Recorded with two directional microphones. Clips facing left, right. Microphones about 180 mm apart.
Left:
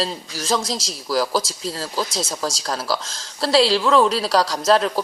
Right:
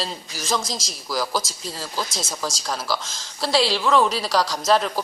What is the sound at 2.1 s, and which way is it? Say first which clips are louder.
Speech: left 4 dB; 30° left (ahead or behind).